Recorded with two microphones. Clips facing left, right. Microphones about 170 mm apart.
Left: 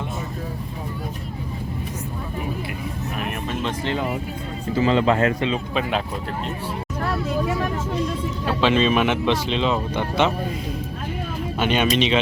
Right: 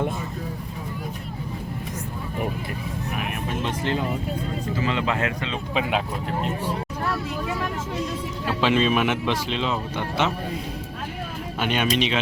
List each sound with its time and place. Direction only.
4.8 s speech: 35° left (ahead or behind)
8.6 s speech: 10° right (ahead or behind)
11.6 s speech: 5° right (ahead or behind)